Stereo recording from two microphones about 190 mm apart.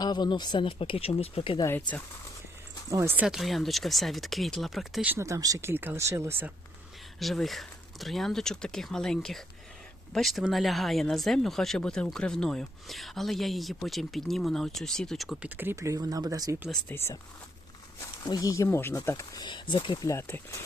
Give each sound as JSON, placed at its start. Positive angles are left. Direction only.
{"t": 0.0, "sound": "speech", "side_deg": 20}
{"t": 1.6, "sound": "speech", "side_deg": 10}
{"t": 2.9, "sound": "speech", "side_deg": -10}
{"t": 7.2, "sound": "speech", "side_deg": 0}
{"t": 16.9, "sound": "speech", "side_deg": 10}